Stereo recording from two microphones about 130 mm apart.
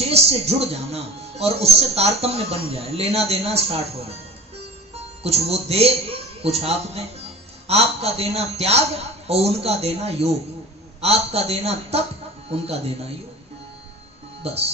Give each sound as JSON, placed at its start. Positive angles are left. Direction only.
{"t": 0.0, "sound": "speech", "side_deg": -50}
{"t": 5.2, "sound": "speech", "side_deg": -50}
{"t": 14.4, "sound": "speech", "side_deg": -50}